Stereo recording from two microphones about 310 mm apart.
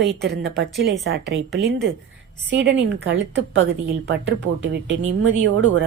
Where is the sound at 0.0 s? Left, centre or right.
Right.